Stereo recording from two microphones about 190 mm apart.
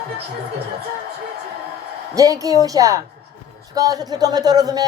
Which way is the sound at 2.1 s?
20° right (ahead or behind).